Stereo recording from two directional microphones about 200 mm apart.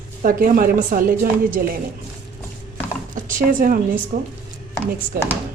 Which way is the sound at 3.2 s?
40° right (ahead or behind).